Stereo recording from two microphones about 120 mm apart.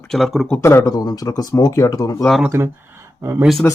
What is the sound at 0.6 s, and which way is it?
Speech, 25° left (ahead or behind).